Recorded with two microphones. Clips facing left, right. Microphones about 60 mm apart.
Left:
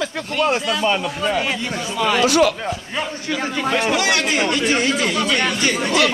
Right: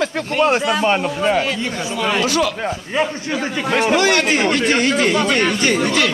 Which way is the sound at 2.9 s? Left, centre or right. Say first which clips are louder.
Right 6 dB; right.